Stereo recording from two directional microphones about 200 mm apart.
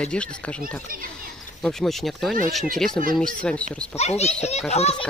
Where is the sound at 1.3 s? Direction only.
Centre (ahead or behind).